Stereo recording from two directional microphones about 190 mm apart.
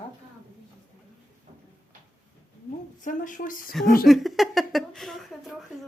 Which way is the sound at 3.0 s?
45° left (ahead or behind).